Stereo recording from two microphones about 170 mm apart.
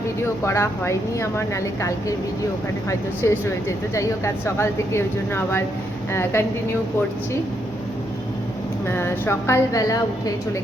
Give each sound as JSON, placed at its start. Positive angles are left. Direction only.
{"t": 0.4, "sound": "a woman's voice", "side_deg": 15}
{"t": 3.2, "sound": "a woman's voice", "side_deg": 15}
{"t": 8.9, "sound": "a woman's voice", "side_deg": 15}